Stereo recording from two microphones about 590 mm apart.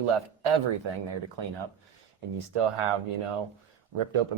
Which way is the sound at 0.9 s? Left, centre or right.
Right.